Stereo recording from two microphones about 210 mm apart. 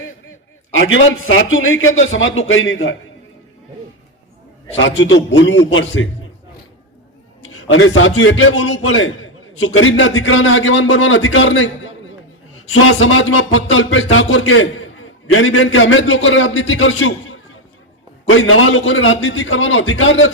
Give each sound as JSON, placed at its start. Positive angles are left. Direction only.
{"t": 0.7, "sound": "a man's voice", "side_deg": 65}
{"t": 4.8, "sound": "a man's voice", "side_deg": 60}
{"t": 7.4, "sound": "a man's voice", "side_deg": 70}
{"t": 12.7, "sound": "a man's voice", "side_deg": 90}